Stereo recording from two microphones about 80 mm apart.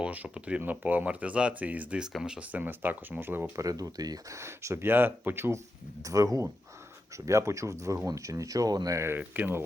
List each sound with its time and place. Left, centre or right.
0.0 s speech: centre
3.5 s speech: right
4.4 s speech: right
6.0 s speech: right
9.0 s speech: right